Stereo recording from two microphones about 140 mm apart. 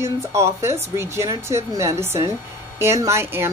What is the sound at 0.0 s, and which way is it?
Speech, 20° right (ahead or behind).